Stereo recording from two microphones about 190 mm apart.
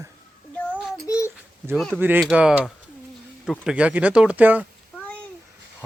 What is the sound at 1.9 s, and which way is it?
Speech, 10° right (ahead or behind).